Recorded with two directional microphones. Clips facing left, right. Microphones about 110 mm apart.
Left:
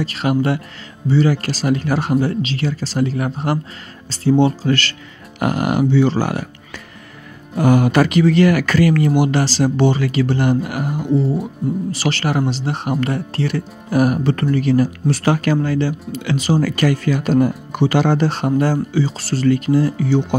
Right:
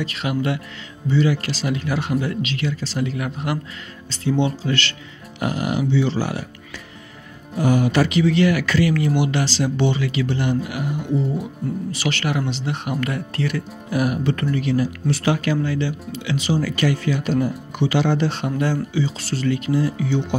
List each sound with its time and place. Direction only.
0.0 s speech: 40° left (ahead or behind)
5.4 s speech: 55° left (ahead or behind); by 20.3 s 40° left (ahead or behind)